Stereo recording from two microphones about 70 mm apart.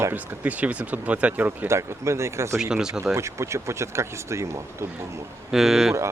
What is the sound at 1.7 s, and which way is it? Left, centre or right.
Speech, right.